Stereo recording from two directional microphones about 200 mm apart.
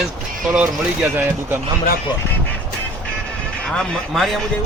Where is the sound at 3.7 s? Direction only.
Centre (ahead or behind).